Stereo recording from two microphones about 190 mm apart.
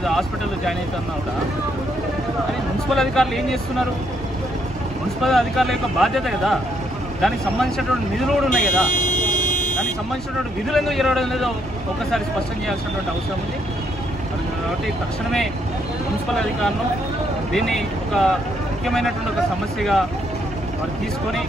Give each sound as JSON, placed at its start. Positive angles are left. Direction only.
{"t": 2.9, "sound": "speech", "side_deg": 0}
{"t": 5.2, "sound": "speech", "side_deg": 0}
{"t": 8.6, "sound": "buzzer", "side_deg": 45}
{"t": 10.7, "sound": "speech", "side_deg": 0}
{"t": 17.5, "sound": "speech", "side_deg": 0}